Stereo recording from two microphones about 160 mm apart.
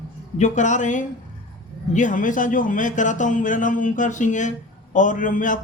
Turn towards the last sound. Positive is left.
turn(degrees=55)  # may be behind; listen again after turning